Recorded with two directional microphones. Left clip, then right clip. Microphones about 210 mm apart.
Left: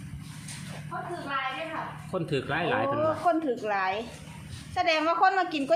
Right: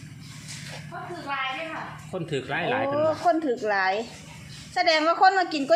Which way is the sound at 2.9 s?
30° right (ahead or behind).